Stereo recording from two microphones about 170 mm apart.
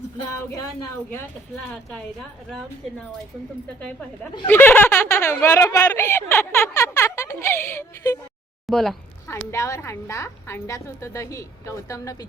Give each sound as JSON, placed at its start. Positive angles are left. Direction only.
{"t": 1.7, "sound": "a woman's voice", "side_deg": 5}
{"t": 4.0, "sound": "speech", "side_deg": 10}
{"t": 8.6, "sound": "speech", "side_deg": 0}
{"t": 9.2, "sound": "speech", "side_deg": 15}